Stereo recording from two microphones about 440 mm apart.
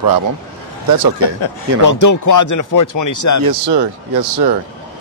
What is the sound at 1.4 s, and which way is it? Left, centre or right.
Speech, left.